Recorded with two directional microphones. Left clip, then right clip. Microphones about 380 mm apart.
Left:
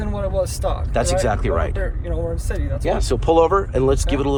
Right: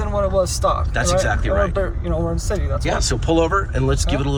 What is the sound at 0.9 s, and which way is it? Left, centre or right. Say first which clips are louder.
Speech: even; centre.